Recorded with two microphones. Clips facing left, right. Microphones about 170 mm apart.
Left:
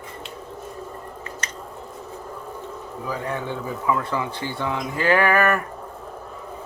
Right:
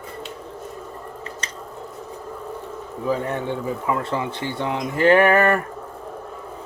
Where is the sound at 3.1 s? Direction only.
25° right (ahead or behind).